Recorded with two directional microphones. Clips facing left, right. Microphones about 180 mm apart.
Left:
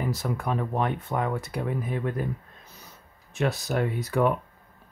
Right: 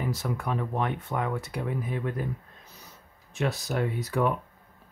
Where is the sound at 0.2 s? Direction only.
45° left (ahead or behind).